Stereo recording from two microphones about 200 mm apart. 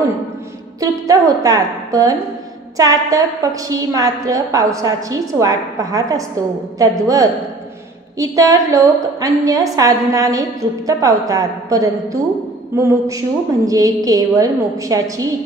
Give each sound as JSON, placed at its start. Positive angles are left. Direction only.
{"t": 0.7, "sound": "a woman's voice", "side_deg": -15}